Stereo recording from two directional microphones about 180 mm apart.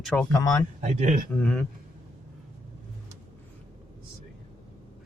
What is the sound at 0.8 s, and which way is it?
Speech, 45° right (ahead or behind).